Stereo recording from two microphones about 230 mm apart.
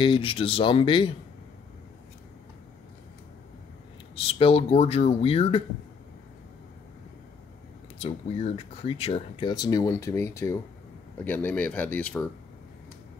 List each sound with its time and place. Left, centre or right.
0.0 s speech: left
4.1 s speech: left
8.0 s speech: left; by 12.3 s centre